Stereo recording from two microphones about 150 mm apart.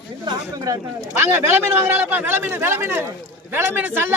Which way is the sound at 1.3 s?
15° right (ahead or behind).